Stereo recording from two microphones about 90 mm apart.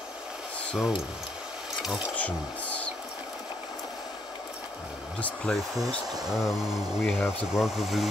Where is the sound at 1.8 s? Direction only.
5° right (ahead or behind).